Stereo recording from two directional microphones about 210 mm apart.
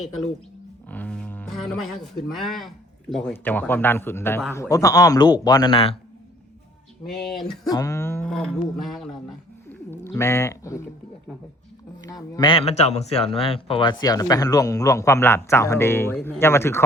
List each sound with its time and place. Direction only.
0.9 s speech: 5° left (ahead or behind); by 6.0 s 25° left (ahead or behind)
7.1 s speech: centre (ahead or behind)
7.7 s speech: 15° left (ahead or behind); by 9.0 s centre (ahead or behind)
9.6 s speech: 10° left (ahead or behind)
12.0 s a man's voice: 20° left (ahead or behind)